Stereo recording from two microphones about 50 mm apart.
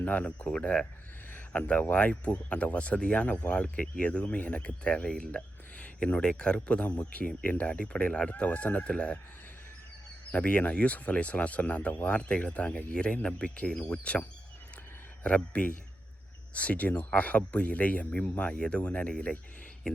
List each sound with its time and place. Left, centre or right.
0.1 s speech: left
1.5 s speech: left
3.5 s speech: left
10.3 s speech: left